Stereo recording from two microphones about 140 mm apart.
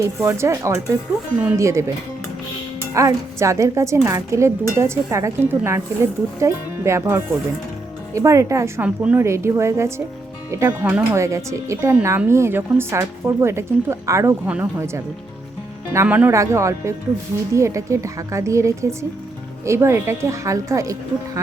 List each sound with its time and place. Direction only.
0.0 s speech: 20° right (ahead or behind)
2.9 s speech: 20° right (ahead or behind)